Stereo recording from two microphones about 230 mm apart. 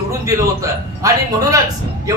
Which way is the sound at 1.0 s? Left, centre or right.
Centre.